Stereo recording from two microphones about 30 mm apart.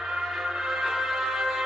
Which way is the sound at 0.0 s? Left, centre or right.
Centre.